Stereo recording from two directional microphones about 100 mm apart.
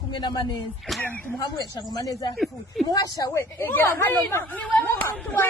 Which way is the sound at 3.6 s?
20° left (ahead or behind).